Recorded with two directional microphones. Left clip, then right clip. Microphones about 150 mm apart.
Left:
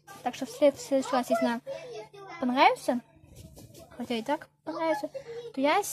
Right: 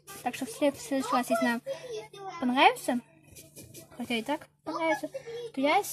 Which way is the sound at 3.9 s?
Centre (ahead or behind).